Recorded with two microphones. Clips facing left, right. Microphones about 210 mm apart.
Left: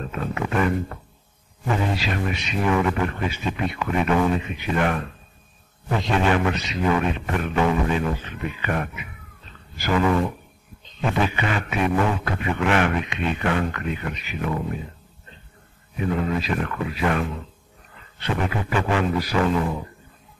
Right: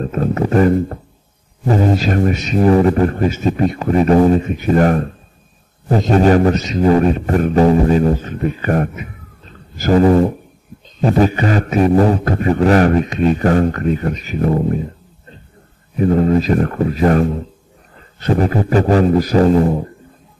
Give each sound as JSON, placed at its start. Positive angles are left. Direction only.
{"t": 0.0, "sound": "speech", "side_deg": -40}
{"t": 16.0, "sound": "speech", "side_deg": -40}